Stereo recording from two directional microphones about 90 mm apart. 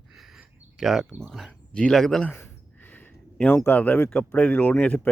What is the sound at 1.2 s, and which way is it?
Speech, 5° left (ahead or behind).